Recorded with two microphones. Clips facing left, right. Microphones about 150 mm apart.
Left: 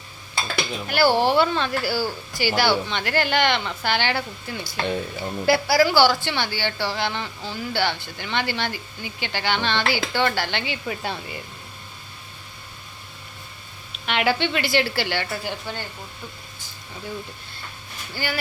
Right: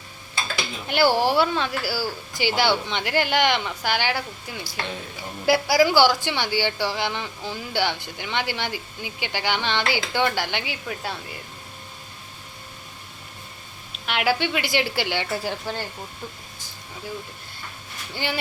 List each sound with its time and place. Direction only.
0.9 s a woman's voice: 20° right (ahead or behind)
2.3 s a woman's voice: 20° right (ahead or behind)
10.8 s speech: centre (ahead or behind)
14.1 s a woman's voice: 5° right (ahead or behind)
15.3 s speech: 35° right (ahead or behind)
18.1 s speech: 20° right (ahead or behind)